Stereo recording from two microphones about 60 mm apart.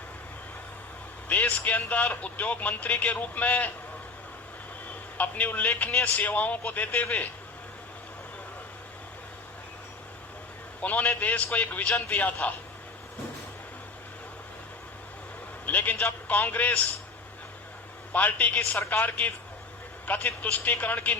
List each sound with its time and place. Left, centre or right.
1.3 s speech: left
4.9 s a man's voice: left
10.8 s speech: left
15.6 s a man's voice: left
18.1 s speech: left